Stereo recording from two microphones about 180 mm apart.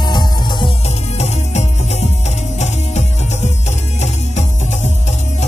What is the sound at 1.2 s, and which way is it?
Music, 40° left (ahead or behind).